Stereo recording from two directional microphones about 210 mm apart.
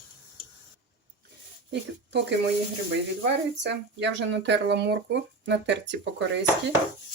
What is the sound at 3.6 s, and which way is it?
Speech, 55° right (ahead or behind).